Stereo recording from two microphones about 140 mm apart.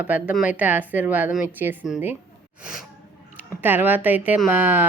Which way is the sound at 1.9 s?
Centre (ahead or behind).